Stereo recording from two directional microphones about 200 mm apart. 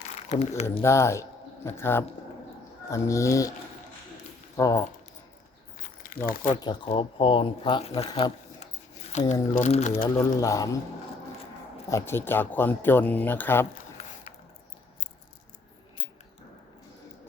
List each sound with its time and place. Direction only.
0.0 s a sound: 35° left (ahead or behind)
0.8 s speech: 15° left (ahead or behind)
4.5 s speech: 15° left (ahead or behind)
5.7 s crumpling: 45° left (ahead or behind)
6.6 s speech: 25° left (ahead or behind)
10.4 s speech: 15° left (ahead or behind)
11.9 s speech: 15° left (ahead or behind)